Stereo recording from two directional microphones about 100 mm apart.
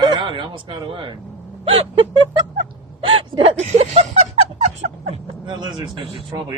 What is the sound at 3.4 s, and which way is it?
Speech, 90° right.